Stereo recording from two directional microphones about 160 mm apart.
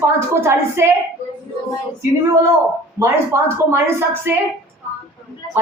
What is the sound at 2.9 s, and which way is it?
Speech, 15° right (ahead or behind).